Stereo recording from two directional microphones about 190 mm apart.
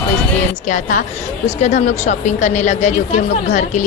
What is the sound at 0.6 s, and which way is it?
A woman's voice, 40° left (ahead or behind).